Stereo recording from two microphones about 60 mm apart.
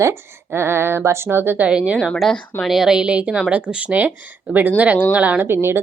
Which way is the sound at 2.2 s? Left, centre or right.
Centre.